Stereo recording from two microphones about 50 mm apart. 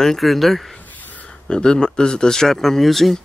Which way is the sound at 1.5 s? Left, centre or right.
Centre.